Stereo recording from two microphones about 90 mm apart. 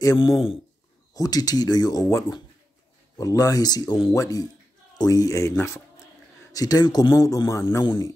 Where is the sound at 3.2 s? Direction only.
40° left (ahead or behind).